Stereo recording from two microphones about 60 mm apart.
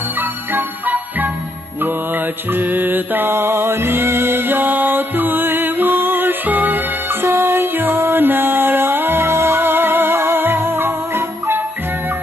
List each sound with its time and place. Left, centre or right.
0.2 s music: right